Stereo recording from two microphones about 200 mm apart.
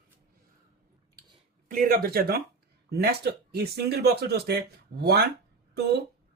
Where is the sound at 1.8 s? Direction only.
45° right (ahead or behind).